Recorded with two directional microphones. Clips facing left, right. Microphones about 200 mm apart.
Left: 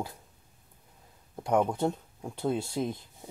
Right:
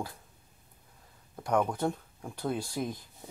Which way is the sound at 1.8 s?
25° left (ahead or behind).